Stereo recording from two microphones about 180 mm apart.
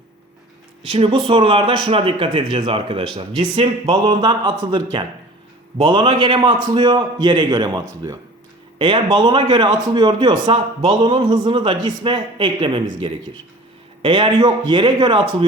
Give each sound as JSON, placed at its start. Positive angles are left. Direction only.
{"t": 0.8, "sound": "speech", "side_deg": -30}